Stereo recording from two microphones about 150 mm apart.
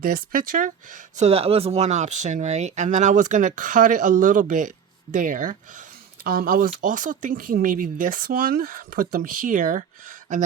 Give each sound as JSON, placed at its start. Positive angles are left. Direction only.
{"t": 0.0, "sound": "speech", "side_deg": -70}
{"t": 1.1, "sound": "speech", "side_deg": -45}
{"t": 6.2, "sound": "speech", "side_deg": -75}